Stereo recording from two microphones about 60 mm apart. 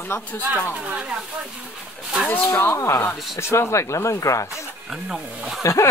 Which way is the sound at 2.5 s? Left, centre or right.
Left.